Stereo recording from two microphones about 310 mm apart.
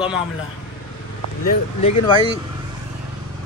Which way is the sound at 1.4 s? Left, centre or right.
Centre.